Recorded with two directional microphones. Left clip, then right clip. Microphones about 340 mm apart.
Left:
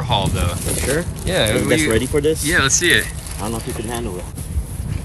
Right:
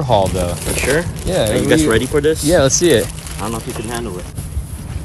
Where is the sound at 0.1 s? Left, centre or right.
Centre.